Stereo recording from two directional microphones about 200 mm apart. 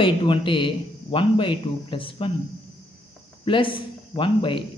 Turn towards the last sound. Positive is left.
turn(degrees=25)  # may be behind; listen again after turning